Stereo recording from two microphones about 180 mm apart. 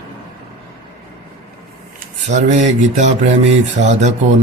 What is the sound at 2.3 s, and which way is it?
Speech, 40° right (ahead or behind).